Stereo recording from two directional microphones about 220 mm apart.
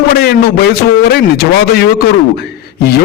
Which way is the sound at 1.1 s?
45° left (ahead or behind).